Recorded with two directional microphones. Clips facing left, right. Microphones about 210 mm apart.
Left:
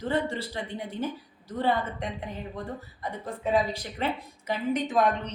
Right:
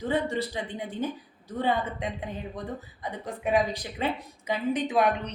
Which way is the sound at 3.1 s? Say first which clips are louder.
Even; 15° right (ahead or behind).